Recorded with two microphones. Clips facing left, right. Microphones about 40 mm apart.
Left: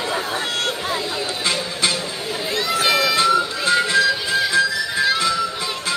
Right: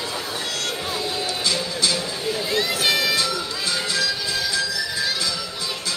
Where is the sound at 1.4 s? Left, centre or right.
Left.